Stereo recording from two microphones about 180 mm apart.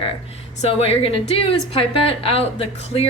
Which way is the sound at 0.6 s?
35° left (ahead or behind).